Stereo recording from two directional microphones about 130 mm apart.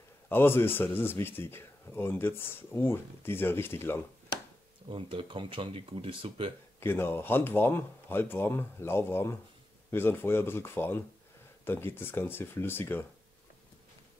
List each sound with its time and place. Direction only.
0.3 s speech: 15° left (ahead or behind)
4.8 s speech: 40° right (ahead or behind)
6.8 s speech: 15° left (ahead or behind)